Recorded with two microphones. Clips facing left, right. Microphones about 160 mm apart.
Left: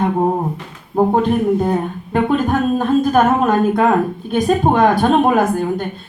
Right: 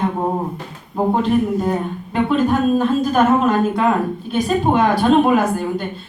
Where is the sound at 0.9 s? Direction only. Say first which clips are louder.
Left 5 dB; 45° left (ahead or behind).